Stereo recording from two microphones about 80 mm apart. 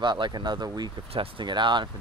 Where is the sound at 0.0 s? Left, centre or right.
Right.